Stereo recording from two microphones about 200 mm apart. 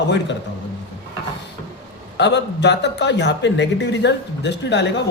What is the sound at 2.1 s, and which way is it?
A man's voice, 60° left (ahead or behind).